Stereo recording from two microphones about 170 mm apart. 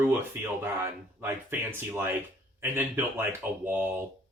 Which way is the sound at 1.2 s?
15° right (ahead or behind).